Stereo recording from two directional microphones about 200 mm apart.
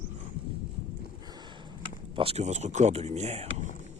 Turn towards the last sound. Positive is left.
turn(degrees=-35)  # may be behind; listen again after turning